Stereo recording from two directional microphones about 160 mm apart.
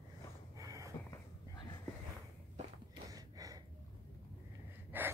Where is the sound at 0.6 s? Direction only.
20° right (ahead or behind).